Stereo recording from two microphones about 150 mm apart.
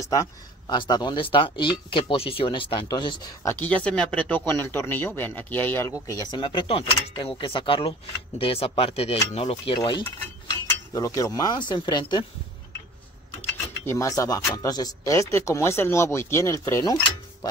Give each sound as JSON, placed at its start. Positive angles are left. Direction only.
{"t": 0.0, "sound": "speech", "side_deg": 20}
{"t": 3.5, "sound": "speech", "side_deg": 10}
{"t": 6.4, "sound": "speech", "side_deg": 35}
{"t": 9.8, "sound": "speech", "side_deg": 30}
{"t": 13.8, "sound": "speech", "side_deg": 20}